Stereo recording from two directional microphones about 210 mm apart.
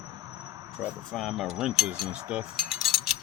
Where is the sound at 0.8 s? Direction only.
Centre (ahead or behind).